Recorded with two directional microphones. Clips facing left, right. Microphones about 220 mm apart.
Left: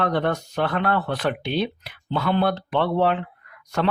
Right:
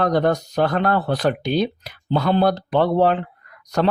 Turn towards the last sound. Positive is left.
turn(degrees=-40)  # may be behind; listen again after turning